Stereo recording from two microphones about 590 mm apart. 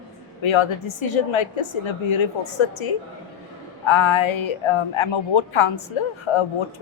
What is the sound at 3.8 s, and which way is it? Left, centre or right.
A woman's voice, left.